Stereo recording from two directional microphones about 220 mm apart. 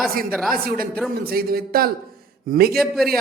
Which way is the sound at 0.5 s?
40° right (ahead or behind).